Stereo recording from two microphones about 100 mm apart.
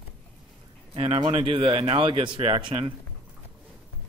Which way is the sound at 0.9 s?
65° right (ahead or behind).